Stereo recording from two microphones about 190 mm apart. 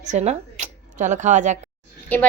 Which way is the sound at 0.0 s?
35° right (ahead or behind).